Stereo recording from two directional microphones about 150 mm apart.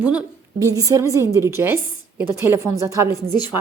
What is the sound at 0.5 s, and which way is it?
A woman's voice, 25° right (ahead or behind).